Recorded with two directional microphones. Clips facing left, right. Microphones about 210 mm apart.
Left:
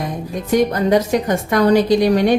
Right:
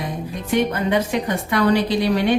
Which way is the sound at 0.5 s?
40° left (ahead or behind).